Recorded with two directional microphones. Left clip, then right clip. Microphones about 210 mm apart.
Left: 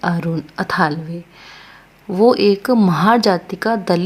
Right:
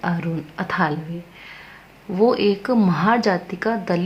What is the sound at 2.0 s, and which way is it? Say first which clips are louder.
A woman's voice: left 5 dB; 35° left (ahead or behind).